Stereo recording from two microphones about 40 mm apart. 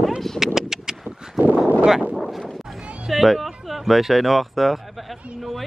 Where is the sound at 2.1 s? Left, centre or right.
Centre.